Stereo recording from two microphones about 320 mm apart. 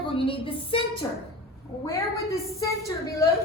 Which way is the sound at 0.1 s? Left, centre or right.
Centre.